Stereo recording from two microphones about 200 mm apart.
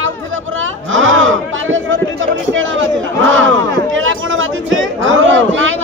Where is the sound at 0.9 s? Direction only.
75° right (ahead or behind).